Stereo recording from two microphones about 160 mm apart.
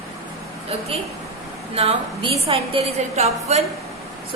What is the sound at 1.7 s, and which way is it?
A woman's voice, 35° right (ahead or behind).